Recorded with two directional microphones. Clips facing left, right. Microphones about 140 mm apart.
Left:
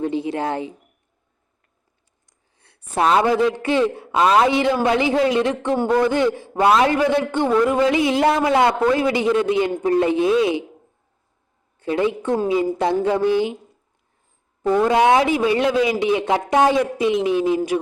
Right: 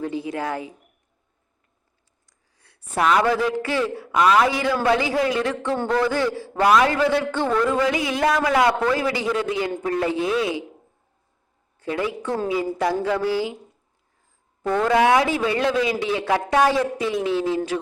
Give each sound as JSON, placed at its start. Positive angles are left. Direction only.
{"t": 0.0, "sound": "speech", "side_deg": 25}
{"t": 2.6, "sound": "a sound", "side_deg": 25}
{"t": 3.2, "sound": "a man's voice", "side_deg": 20}
{"t": 11.8, "sound": "a man's voice", "side_deg": 25}
{"t": 14.6, "sound": "a man's voice", "side_deg": 15}